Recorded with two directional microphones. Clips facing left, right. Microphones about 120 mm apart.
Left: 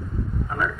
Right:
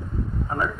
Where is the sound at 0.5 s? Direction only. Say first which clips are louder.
Right 1 dB; 35° right (ahead or behind).